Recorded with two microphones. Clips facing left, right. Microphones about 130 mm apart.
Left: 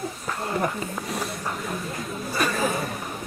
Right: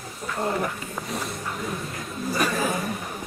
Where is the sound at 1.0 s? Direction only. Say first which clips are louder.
Right 2 dB; centre (ahead or behind).